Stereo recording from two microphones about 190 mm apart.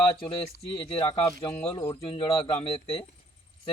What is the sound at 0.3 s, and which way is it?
Speech, 30° left (ahead or behind).